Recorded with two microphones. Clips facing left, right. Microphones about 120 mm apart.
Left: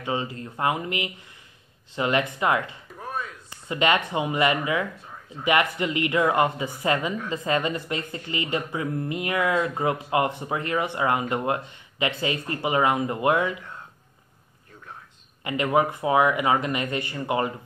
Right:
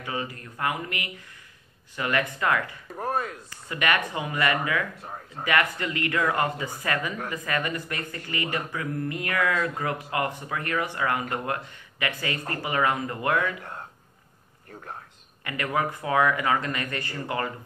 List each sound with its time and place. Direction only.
0.0 s speech: 25° left (ahead or behind)
3.0 s chop: 50° right (ahead or behind)
3.4 s speech: 20° left (ahead or behind)
5.0 s a sound: 50° right (ahead or behind)
5.4 s speech: 20° left (ahead or behind)
15.4 s speech: 20° left (ahead or behind)